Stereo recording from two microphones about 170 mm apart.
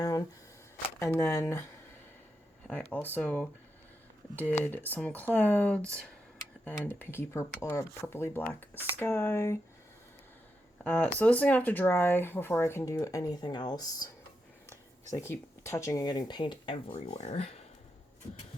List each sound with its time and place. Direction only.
0.0 s shuffling cards: 20° left (ahead or behind)
0.9 s speech: 15° left (ahead or behind)
2.6 s speech: 10° left (ahead or behind)
4.6 s speech: 10° left (ahead or behind)
10.8 s speech: 5° left (ahead or behind); by 14.1 s 20° left (ahead or behind)
15.1 s speech: 15° left (ahead or behind); by 17.7 s 40° left (ahead or behind)